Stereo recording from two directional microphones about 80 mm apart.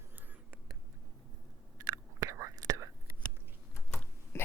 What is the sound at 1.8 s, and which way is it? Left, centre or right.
Whispering, right.